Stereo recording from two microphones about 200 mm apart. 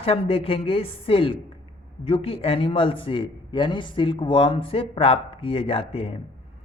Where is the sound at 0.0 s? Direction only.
30° left (ahead or behind).